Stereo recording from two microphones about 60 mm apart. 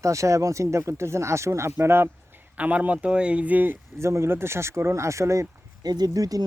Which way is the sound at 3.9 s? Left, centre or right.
Right.